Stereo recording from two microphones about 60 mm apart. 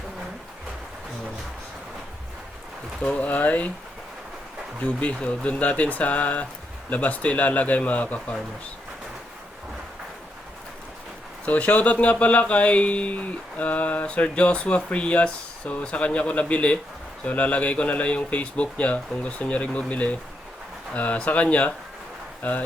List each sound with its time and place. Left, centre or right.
3.0 s speech: left
4.8 s speech: left
11.4 s speech: left